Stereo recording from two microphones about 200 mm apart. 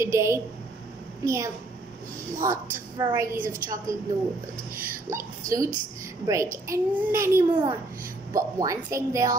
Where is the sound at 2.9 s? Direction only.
15° right (ahead or behind).